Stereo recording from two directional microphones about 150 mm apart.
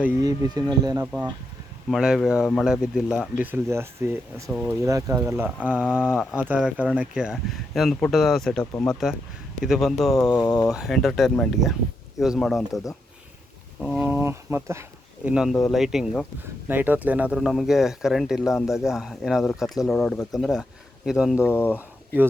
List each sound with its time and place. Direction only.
0.2 s speech: 25° right (ahead or behind)
1.0 s speech: 10° right (ahead or behind)
4.4 s speech: centre (ahead or behind)
4.9 s speech: 20° right (ahead or behind); by 12.9 s centre (ahead or behind)
14.0 s speech: 15° right (ahead or behind)
15.2 s speech: 5° right (ahead or behind)
16.6 s speech: 10° right (ahead or behind)
21.3 s speech: 15° left (ahead or behind)
21.8 s a sound: 10° right (ahead or behind)